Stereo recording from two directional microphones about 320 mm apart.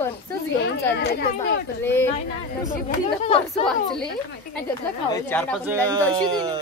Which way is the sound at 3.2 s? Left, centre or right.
Centre.